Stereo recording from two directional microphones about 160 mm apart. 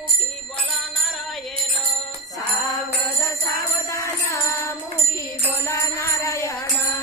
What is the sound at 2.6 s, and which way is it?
Jingle bell, 20° left (ahead or behind).